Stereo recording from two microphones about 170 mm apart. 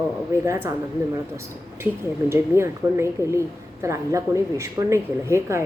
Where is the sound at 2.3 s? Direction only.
15° right (ahead or behind).